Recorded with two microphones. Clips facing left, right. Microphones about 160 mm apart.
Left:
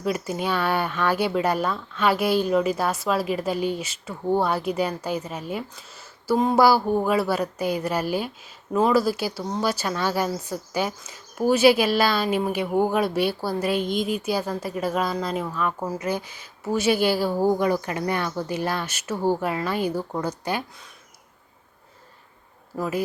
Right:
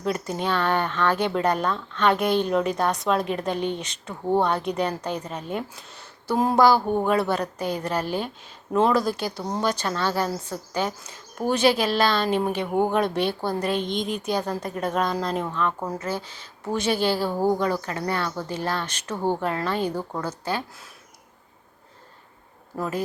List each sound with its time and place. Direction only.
0.0 s speech: 5° left (ahead or behind)
22.8 s speech: 10° left (ahead or behind)